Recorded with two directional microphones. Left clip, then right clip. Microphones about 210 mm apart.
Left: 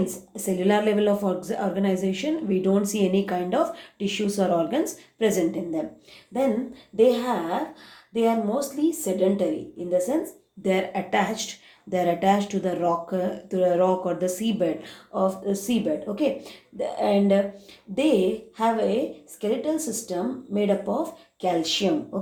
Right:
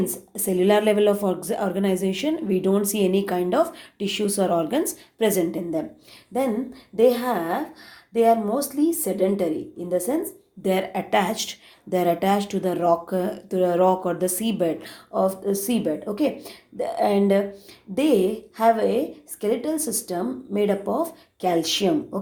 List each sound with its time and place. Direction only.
0.0 s speech: 45° right (ahead or behind)
10.6 s speech: 40° right (ahead or behind)